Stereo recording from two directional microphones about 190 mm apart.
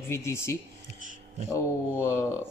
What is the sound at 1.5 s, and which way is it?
Speech, 15° left (ahead or behind).